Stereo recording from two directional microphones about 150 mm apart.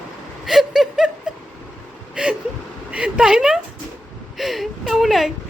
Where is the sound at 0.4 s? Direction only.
Centre (ahead or behind).